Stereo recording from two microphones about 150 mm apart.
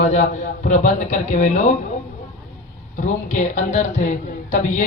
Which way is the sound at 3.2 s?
55° left (ahead or behind).